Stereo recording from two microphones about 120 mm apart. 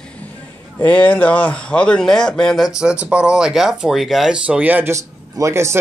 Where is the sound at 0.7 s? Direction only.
15° left (ahead or behind).